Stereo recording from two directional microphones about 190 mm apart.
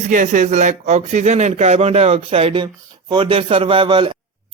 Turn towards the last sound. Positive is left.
turn(degrees=-25)  # may be behind; listen again after turning